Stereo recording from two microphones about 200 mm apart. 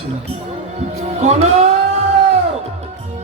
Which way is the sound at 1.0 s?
35° right (ahead or behind).